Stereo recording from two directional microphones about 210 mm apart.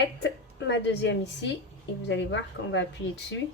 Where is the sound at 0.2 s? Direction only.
55° left (ahead or behind).